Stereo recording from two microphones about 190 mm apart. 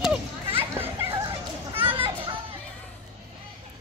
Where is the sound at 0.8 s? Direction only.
10° right (ahead or behind).